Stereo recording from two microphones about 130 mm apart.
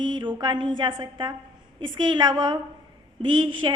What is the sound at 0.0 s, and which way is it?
A woman's voice, 35° right (ahead or behind).